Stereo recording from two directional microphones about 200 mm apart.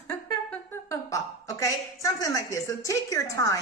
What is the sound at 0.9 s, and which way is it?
A woman's voice, 15° left (ahead or behind).